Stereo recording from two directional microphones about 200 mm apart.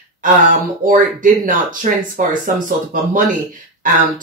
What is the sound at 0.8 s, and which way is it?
Speech, 45° right (ahead or behind).